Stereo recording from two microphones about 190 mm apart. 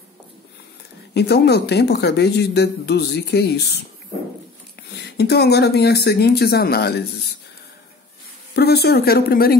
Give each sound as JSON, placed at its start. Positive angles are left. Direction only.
{"t": 1.1, "sound": "speech", "side_deg": 60}
{"t": 5.0, "sound": "speech", "side_deg": 60}
{"t": 8.5, "sound": "speech", "side_deg": 60}